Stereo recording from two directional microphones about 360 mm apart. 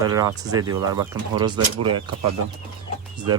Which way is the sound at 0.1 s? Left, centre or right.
Centre.